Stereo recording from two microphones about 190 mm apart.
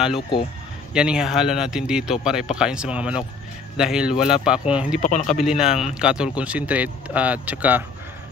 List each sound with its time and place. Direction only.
0.9 s speech: 5° right (ahead or behind)
5.0 s speech: 40° left (ahead or behind)
5.4 s speech: 5° right (ahead or behind)